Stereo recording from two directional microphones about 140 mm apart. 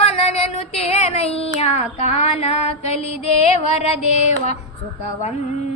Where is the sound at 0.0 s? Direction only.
50° left (ahead or behind).